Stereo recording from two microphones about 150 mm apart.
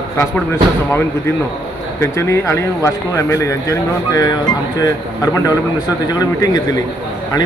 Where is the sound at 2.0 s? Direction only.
20° left (ahead or behind).